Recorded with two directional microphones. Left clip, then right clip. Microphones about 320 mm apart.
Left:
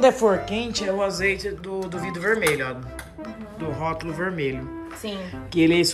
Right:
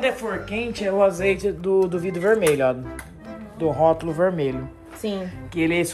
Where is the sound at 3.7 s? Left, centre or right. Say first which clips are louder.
Right 9 dB; right.